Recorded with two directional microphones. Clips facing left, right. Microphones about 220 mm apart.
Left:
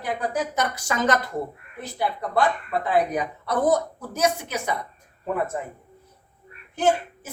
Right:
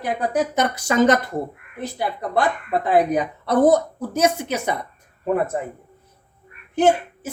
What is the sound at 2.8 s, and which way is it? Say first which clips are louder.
A woman's voice: right 5 dB; 25° right (ahead or behind).